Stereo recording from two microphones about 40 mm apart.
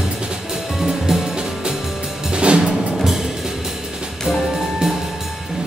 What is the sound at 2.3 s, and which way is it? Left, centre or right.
Music, right.